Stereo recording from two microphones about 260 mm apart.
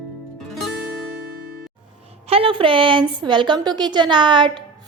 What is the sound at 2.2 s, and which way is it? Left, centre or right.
A woman's voice, right.